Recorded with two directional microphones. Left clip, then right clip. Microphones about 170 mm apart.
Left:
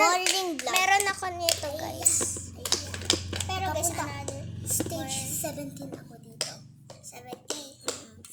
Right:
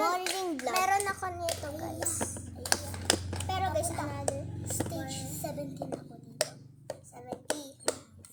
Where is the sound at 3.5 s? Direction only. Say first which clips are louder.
Left 1 dB; 5° left (ahead or behind).